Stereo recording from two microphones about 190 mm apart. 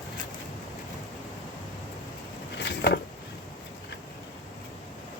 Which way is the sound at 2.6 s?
60° left (ahead or behind).